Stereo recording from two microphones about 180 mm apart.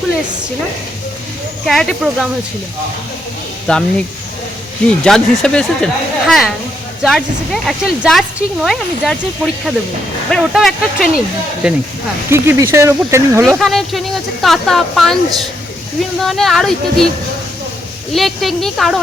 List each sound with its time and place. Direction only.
1.6 s speech: centre (ahead or behind)
3.7 s speech: 5° left (ahead or behind)
5.0 s speech: 5° left (ahead or behind); by 13.6 s 15° right (ahead or behind)
13.6 s speech: centre (ahead or behind)
16.2 s speech: centre (ahead or behind)
18.1 s speech: centre (ahead or behind)